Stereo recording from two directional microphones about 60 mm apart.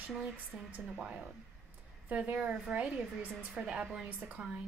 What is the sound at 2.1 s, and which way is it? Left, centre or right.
A woman's voice, right.